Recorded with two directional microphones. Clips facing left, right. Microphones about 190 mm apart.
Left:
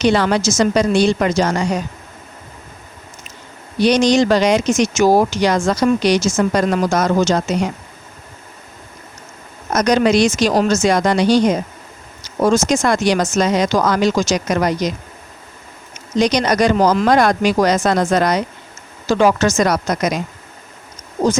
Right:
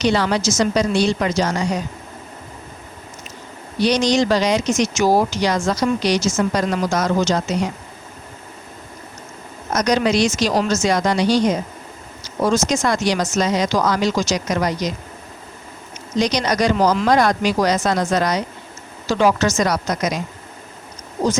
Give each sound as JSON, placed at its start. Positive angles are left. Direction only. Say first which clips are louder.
{"t": 0.0, "sound": "speech", "louder": "left 3 dB", "side_deg": 55}
{"t": 3.8, "sound": "speech", "louder": "left 4 dB", "side_deg": 55}
{"t": 9.7, "sound": "speech", "louder": "left 4 dB", "side_deg": 55}
{"t": 16.1, "sound": "speech", "louder": "left 4 dB", "side_deg": 55}